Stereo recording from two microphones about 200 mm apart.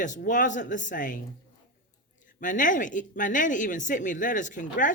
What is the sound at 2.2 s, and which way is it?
Speech, 40° left (ahead or behind).